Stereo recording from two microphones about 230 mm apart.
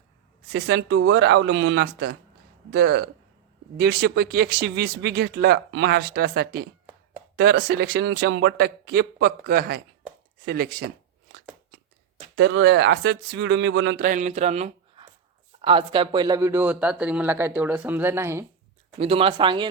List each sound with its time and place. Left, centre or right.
0.5 s a man's voice: right
12.4 s a man's voice: right
14.0 s speech: right; by 18.4 s centre
18.9 s speech: right